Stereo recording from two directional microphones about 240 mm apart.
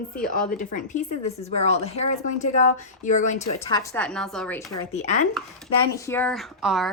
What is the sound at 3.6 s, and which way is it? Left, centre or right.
Speech, centre.